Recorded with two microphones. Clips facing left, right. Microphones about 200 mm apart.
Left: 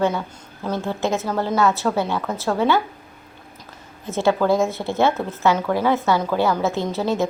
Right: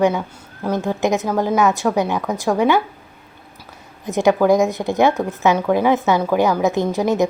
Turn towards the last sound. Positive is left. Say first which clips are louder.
# right 4 dB
turn(degrees=-15)  # may be behind; listen again after turning